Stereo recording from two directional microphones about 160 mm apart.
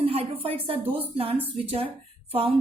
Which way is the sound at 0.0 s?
35° right (ahead or behind).